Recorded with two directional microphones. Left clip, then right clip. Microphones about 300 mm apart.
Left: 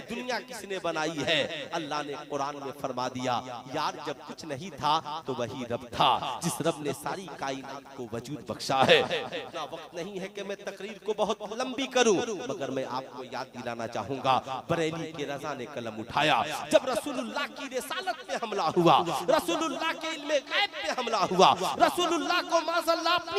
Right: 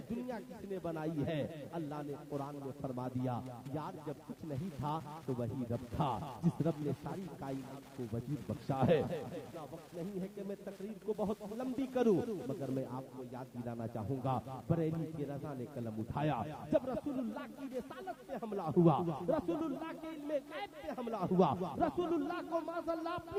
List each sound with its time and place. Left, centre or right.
0.1 s a man's voice: centre
8.7 s a man's voice: centre
11.2 s speech: left
11.5 s a man's voice: centre